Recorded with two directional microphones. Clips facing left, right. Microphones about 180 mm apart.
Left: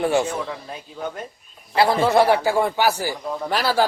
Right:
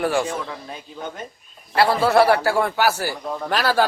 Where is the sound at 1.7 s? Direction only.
20° left (ahead or behind).